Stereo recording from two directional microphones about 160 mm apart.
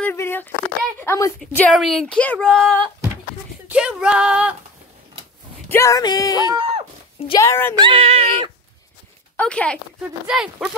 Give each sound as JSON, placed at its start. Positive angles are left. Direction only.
{"t": 0.0, "sound": "a sound", "side_deg": 15}
{"t": 1.0, "sound": "a woman's voice", "side_deg": 20}
{"t": 1.7, "sound": "speech", "side_deg": 0}
{"t": 3.6, "sound": "speech", "side_deg": -5}
{"t": 5.7, "sound": "music", "side_deg": 20}
{"t": 6.5, "sound": "speech", "side_deg": -35}
{"t": 7.3, "sound": "speech", "side_deg": 15}
{"t": 7.7, "sound": "speech", "side_deg": -35}
{"t": 9.4, "sound": "speech", "side_deg": 5}
{"t": 10.2, "sound": "speech", "side_deg": -5}